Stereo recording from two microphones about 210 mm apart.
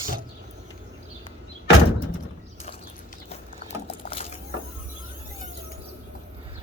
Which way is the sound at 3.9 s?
25° left (ahead or behind).